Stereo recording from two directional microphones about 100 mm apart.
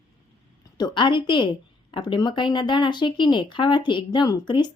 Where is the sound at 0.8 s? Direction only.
50° left (ahead or behind).